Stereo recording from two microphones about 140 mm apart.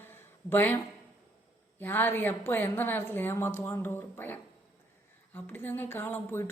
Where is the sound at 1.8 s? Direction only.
15° left (ahead or behind).